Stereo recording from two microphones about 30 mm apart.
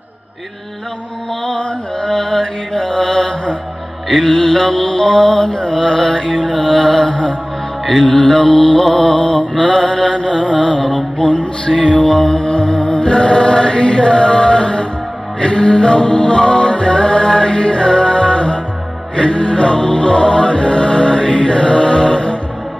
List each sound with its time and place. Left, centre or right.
1.6 s mantra: left
7.8 s music: centre
8.4 s mantra: left
8.7 s music: centre
9.0 s mantra: left
15.4 s music: left